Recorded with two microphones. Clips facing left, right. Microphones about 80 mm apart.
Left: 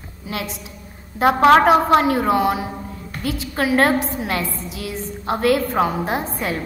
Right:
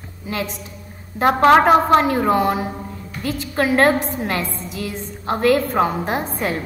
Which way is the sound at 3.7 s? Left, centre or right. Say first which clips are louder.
Right 1 dB; centre.